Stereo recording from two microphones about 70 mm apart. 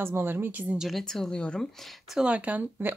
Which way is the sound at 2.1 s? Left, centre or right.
Centre.